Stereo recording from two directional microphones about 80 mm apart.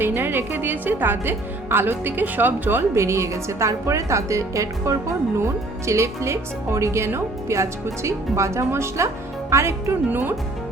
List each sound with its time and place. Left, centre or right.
0.0 s a woman's voice: right
10.1 s speech: right